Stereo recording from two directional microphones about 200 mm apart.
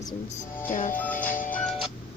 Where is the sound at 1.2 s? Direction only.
40° left (ahead or behind).